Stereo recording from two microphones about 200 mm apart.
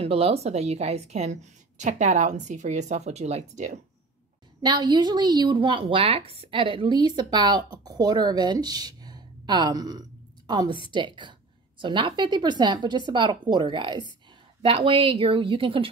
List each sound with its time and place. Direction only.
0.0 s a woman's voice: 30° right (ahead or behind)
4.6 s a woman's voice: 20° right (ahead or behind)